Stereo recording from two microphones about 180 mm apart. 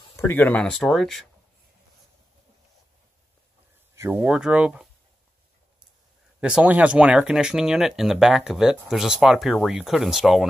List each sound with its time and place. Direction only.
0.1 s speech: 10° left (ahead or behind)
3.9 s a sound: 15° right (ahead or behind)
4.2 s speech: 5° right (ahead or behind)
6.4 s speech: 5° right (ahead or behind)